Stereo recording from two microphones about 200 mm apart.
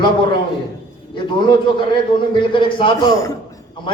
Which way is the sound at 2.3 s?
25° left (ahead or behind).